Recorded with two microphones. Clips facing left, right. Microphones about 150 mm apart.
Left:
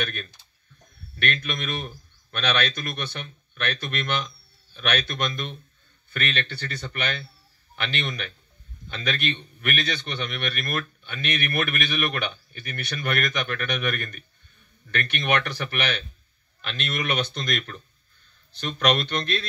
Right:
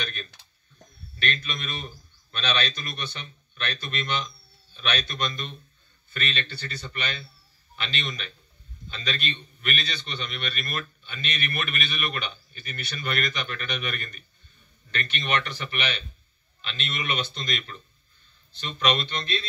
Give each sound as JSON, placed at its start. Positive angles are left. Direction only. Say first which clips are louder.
{"t": 0.0, "sound": "a man's voice", "louder": "left 5 dB", "side_deg": 55}